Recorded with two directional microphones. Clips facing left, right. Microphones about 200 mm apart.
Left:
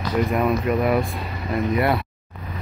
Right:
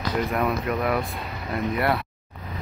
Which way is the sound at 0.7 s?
25° left (ahead or behind).